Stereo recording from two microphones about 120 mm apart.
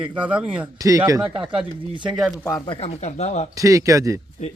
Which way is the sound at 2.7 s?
55° left (ahead or behind).